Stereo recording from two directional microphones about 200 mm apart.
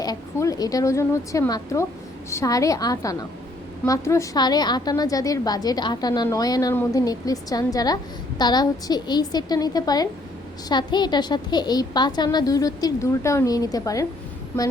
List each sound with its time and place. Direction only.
0.0 s a woman's voice: 15° left (ahead or behind)